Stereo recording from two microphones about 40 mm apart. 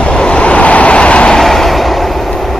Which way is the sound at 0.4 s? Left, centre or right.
Left.